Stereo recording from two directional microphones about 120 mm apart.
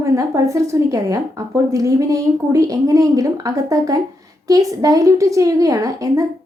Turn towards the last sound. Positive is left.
turn(degrees=-30)  # may be behind; listen again after turning